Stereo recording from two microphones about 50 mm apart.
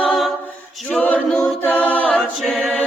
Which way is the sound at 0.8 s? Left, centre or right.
Left.